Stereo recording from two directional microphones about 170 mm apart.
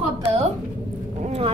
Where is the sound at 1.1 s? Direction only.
40° right (ahead or behind).